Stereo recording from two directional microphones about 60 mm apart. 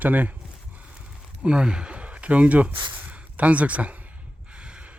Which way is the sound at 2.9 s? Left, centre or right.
Right.